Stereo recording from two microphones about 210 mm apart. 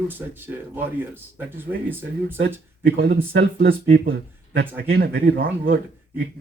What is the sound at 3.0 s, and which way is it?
Speech, 50° right (ahead or behind).